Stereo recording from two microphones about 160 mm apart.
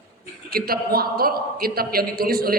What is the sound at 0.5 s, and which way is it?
A man's voice, 70° right (ahead or behind).